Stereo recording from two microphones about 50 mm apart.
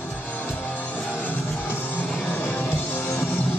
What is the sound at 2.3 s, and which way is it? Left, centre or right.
Music, left.